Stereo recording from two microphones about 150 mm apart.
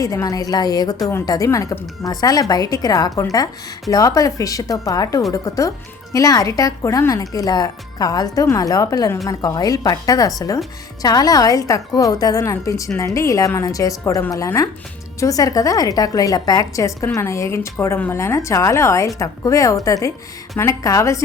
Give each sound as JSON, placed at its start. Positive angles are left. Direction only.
{"t": 0.0, "sound": "speech", "side_deg": 20}